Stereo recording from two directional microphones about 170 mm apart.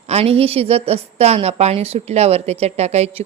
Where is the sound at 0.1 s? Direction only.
35° right (ahead or behind).